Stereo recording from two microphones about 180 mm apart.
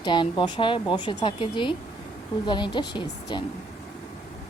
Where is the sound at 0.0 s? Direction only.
25° left (ahead or behind).